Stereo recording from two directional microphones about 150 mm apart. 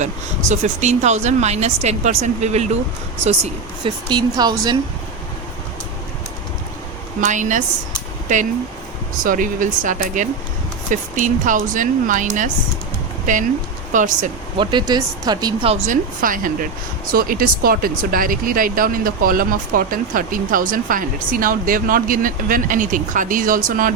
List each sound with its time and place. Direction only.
0.0 s speech: 50° right (ahead or behind)
4.1 s speech: 25° right (ahead or behind)
7.2 s speech: 55° right (ahead or behind)
14.6 s speech: 30° right (ahead or behind)
15.9 s speech: 65° right (ahead or behind)